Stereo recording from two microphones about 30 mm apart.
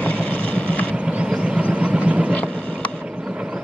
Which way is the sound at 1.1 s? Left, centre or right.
Right.